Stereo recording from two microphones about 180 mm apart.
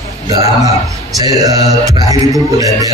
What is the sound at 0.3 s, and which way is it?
A man's voice, 20° right (ahead or behind).